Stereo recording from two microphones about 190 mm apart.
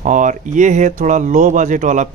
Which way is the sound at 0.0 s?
40° right (ahead or behind).